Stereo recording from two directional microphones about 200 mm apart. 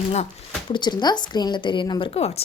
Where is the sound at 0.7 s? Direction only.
20° left (ahead or behind).